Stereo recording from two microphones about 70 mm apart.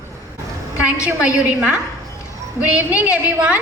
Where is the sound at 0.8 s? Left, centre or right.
Centre.